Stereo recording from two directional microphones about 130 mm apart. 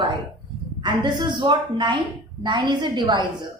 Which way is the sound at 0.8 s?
35° right (ahead or behind).